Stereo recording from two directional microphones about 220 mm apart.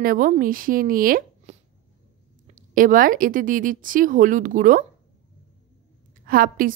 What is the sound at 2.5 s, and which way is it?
Speech, 40° right (ahead or behind).